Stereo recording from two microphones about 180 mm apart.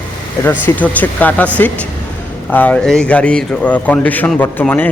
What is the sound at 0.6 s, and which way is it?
A man's voice, 10° left (ahead or behind).